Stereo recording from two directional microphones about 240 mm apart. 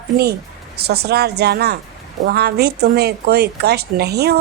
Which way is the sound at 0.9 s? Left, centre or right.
Right.